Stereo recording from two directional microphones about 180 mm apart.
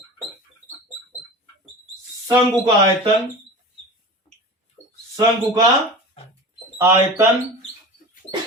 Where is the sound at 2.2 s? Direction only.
20° right (ahead or behind).